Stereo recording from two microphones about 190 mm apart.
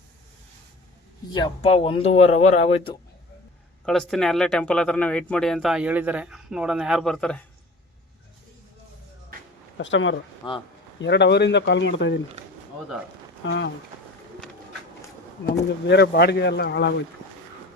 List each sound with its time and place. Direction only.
1.3 s speech: 25° left (ahead or behind)
3.8 s speech: centre (ahead or behind)
9.7 s speech: 80° left
10.4 s speech: 25° left (ahead or behind)
11.0 s speech: 65° left (ahead or behind)
13.4 s speech: 75° left (ahead or behind)
15.9 s speech: 60° left (ahead or behind)